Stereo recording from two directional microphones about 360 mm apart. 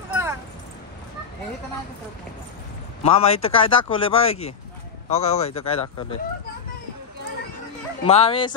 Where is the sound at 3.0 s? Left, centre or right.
Centre.